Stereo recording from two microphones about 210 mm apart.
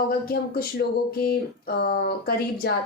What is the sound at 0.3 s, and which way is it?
Speech, 45° left (ahead or behind).